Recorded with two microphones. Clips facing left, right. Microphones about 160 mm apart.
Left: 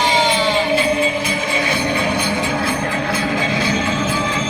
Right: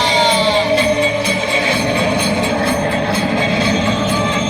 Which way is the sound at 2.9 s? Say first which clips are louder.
Right 4 dB; 30° right (ahead or behind).